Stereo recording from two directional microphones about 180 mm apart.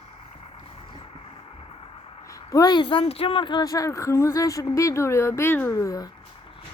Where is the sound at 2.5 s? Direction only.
20° left (ahead or behind).